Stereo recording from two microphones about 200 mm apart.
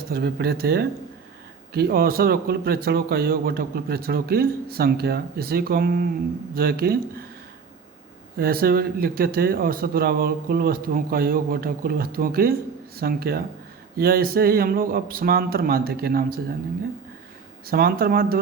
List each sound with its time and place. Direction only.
0.1 s a man's voice: 55° right (ahead or behind)
8.4 s a man's voice: 50° right (ahead or behind)
17.7 s a man's voice: 50° right (ahead or behind)